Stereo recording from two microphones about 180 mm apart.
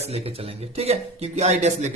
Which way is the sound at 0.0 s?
35° right (ahead or behind).